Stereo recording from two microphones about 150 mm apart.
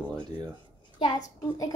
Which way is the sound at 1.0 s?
30° left (ahead or behind).